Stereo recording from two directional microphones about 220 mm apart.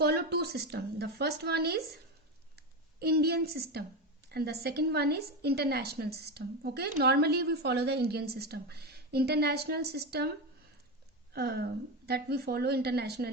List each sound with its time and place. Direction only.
0.0 s a woman's voice: 45° right (ahead or behind)
3.0 s a woman's voice: 45° right (ahead or behind)
11.3 s a woman's voice: 45° right (ahead or behind)